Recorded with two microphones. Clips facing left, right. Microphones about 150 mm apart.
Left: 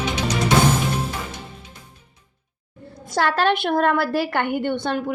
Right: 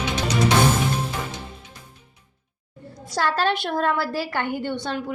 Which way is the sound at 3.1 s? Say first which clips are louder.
Left 3 dB; 65° left (ahead or behind).